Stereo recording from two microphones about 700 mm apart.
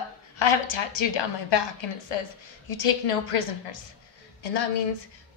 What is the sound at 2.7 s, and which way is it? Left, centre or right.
A woman's voice, left.